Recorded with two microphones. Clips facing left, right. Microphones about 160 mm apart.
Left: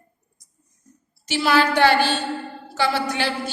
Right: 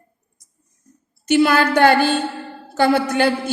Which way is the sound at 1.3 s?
55° right (ahead or behind).